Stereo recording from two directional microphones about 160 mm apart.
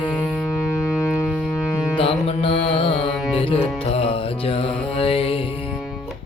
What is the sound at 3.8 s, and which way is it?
Speech, 40° left (ahead or behind).